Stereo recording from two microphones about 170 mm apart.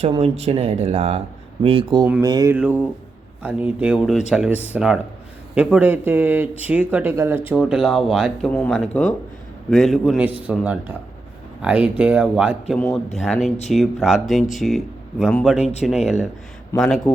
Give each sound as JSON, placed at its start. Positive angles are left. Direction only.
{"t": 0.2, "sound": "speech", "side_deg": -35}
{"t": 2.6, "sound": "speech", "side_deg": -10}
{"t": 15.5, "sound": "speech", "side_deg": 40}
{"t": 16.0, "sound": "speech", "side_deg": 0}